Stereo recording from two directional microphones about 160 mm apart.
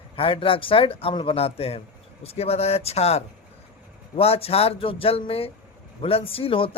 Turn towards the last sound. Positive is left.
turn(degrees=35)  # may be behind; listen again after turning